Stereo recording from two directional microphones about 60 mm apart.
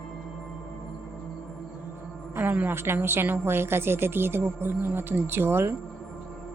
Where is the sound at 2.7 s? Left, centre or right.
Right.